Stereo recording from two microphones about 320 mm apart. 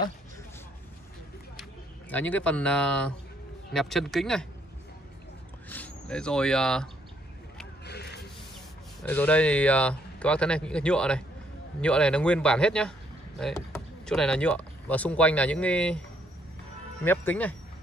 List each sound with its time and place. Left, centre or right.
1.6 s speech: centre
5.7 s speech: centre
7.8 s a sound: left
9.0 s speech: centre
17.0 s speech: centre